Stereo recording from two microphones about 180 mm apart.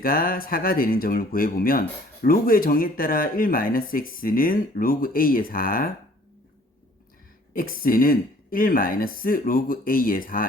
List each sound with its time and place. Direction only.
0.0 s speech: 55° left (ahead or behind)
7.5 s speech: 50° left (ahead or behind)